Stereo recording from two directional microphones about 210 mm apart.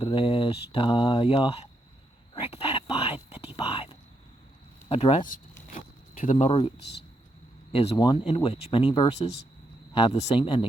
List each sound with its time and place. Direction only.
0.0 s speech: 25° left (ahead or behind)
2.3 s whispering: 25° left (ahead or behind)
4.9 s speech: 25° left (ahead or behind)
6.2 s speech: 30° left (ahead or behind)
7.7 s speech: 25° left (ahead or behind)